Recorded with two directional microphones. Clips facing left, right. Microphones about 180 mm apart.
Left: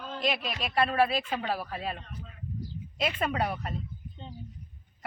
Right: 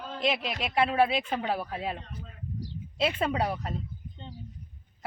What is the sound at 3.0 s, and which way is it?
Speech, 30° right (ahead or behind).